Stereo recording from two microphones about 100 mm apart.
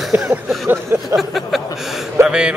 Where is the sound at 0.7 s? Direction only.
25° right (ahead or behind).